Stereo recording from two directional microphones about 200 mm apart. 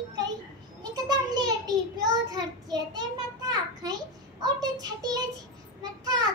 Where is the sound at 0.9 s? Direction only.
20° right (ahead or behind).